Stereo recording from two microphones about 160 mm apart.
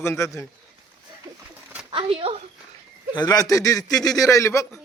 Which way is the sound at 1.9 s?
35° right (ahead or behind).